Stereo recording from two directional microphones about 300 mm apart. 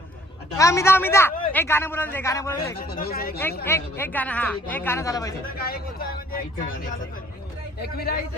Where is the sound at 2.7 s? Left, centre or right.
Left.